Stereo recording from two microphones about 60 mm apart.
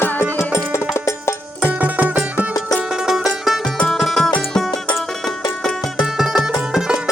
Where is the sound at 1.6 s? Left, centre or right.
Right.